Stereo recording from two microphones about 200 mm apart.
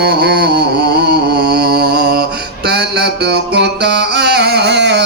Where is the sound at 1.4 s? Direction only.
55° right (ahead or behind).